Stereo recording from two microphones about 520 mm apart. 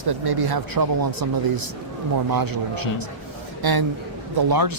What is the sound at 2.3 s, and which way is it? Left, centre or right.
A man's voice, right.